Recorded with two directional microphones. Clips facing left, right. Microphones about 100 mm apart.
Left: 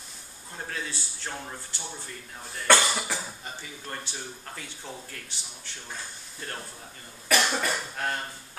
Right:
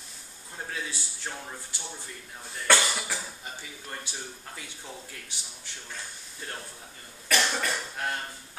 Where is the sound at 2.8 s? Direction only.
5° left (ahead or behind).